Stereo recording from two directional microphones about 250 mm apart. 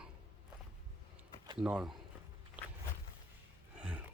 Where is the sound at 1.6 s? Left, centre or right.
Centre.